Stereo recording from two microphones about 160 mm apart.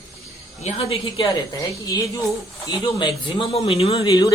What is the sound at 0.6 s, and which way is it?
Speech, 35° left (ahead or behind).